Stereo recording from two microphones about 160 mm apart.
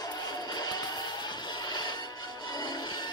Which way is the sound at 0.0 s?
25° left (ahead or behind).